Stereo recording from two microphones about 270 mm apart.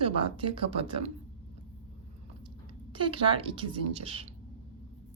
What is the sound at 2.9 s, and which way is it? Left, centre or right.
A woman's voice, centre.